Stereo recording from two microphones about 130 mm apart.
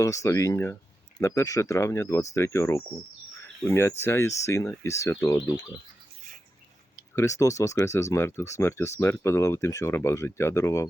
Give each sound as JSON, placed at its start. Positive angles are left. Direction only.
{"t": 0.0, "sound": "speech", "side_deg": 25}
{"t": 7.2, "sound": "speech", "side_deg": 25}